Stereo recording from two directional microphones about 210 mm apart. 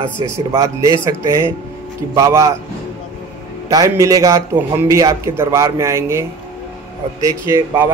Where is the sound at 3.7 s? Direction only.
15° right (ahead or behind).